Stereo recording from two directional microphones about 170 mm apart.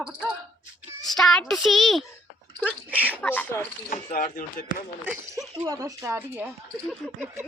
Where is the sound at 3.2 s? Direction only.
10° left (ahead or behind).